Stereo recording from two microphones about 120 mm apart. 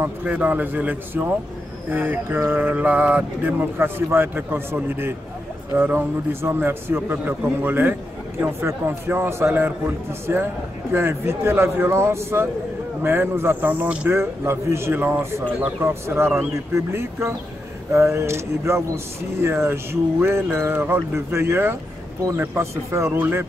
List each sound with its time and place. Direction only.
0.0 s mantra: 15° right (ahead or behind)
8.4 s speech: 20° right (ahead or behind)
13.0 s mantra: 20° right (ahead or behind)
16.7 s speech: 20° right (ahead or behind)